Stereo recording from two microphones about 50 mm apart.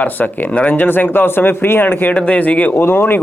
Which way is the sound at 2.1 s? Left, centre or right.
Left.